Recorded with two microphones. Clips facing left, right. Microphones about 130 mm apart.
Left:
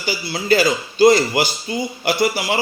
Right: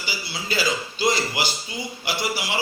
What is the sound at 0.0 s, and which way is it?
A man's voice, 50° left (ahead or behind).